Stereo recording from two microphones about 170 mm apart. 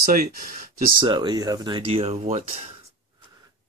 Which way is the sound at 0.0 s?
60° right (ahead or behind).